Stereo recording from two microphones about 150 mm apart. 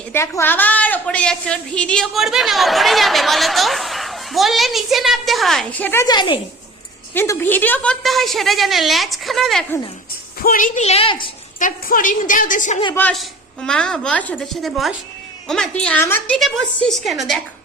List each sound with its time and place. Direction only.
0.1 s a woman's voice: 15° left (ahead or behind)
6.1 s a woman's voice: 30° left (ahead or behind)
7.1 s a woman's voice: 15° left (ahead or behind)
8.0 s a woman's voice: centre (ahead or behind)
10.4 s a woman's voice: 70° left (ahead or behind)
10.8 s a woman's voice: 45° left (ahead or behind)
11.6 s a woman's voice: 65° left (ahead or behind)
12.9 s a woman's voice: 10° left (ahead or behind)